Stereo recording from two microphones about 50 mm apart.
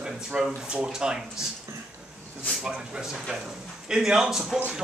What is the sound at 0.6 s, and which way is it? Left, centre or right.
Speech, centre.